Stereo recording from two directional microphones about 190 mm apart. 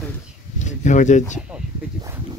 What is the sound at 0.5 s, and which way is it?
Speech, 40° left (ahead or behind).